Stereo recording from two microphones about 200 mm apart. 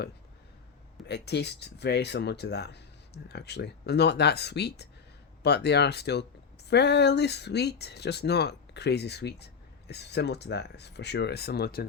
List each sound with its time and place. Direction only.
1.0 s speech: 55° left (ahead or behind)